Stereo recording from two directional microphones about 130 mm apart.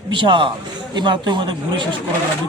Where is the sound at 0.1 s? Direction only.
40° right (ahead or behind).